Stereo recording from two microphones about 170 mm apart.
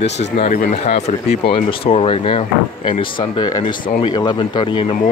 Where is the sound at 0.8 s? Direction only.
40° left (ahead or behind).